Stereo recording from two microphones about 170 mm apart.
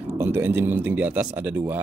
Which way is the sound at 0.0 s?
15° right (ahead or behind).